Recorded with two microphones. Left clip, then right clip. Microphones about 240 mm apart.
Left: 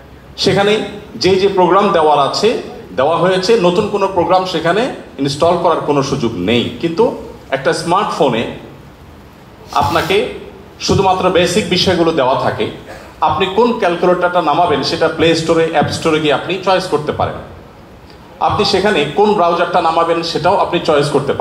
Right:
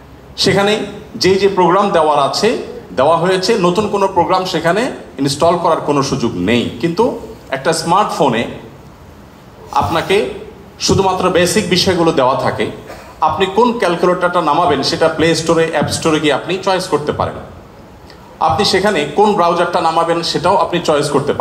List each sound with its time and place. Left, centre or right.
0.4 s a man's voice: right
9.8 s a man's voice: right
18.4 s a man's voice: right